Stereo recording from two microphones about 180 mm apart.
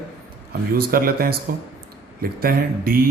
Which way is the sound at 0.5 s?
55° right (ahead or behind).